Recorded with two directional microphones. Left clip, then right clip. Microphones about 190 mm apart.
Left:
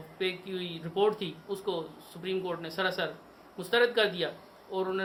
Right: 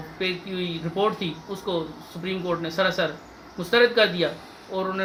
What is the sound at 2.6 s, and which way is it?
Speech, 25° left (ahead or behind).